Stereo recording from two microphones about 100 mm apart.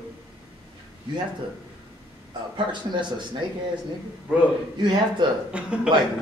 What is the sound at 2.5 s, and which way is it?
Speech, 50° right (ahead or behind).